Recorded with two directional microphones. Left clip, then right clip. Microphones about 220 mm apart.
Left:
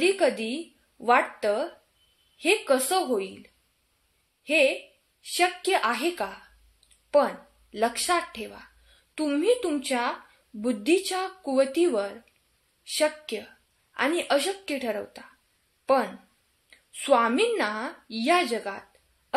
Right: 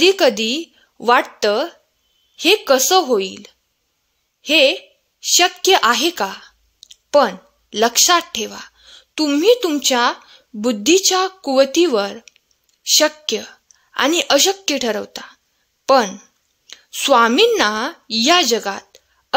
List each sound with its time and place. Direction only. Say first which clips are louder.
0.0 s a woman's voice: right 10 dB; 50° right (ahead or behind)
15.8 s a sound: right 10 dB; 50° right (ahead or behind)
16.6 s a woman's voice: right 9 dB; 50° right (ahead or behind)